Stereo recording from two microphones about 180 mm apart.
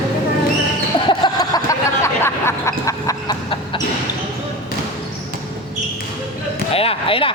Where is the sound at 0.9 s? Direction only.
25° left (ahead or behind).